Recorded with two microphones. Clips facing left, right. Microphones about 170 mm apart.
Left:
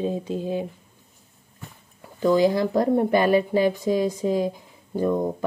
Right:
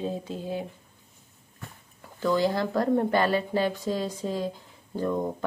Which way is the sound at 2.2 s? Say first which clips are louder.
Left 6 dB; 15° left (ahead or behind).